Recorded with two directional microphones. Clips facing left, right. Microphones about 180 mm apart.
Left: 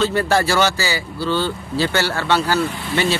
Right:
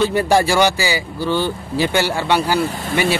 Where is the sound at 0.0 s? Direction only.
15° right (ahead or behind).